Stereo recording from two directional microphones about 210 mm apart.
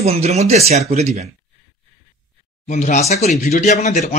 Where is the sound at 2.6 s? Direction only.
35° left (ahead or behind).